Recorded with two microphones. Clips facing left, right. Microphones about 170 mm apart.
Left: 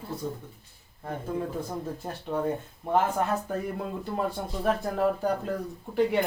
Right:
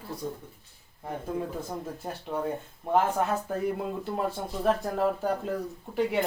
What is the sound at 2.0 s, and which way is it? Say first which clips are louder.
Speech: left 2 dB; centre (ahead or behind).